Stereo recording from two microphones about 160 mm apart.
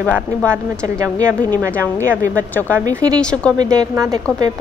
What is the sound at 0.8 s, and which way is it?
Speech, 20° right (ahead or behind).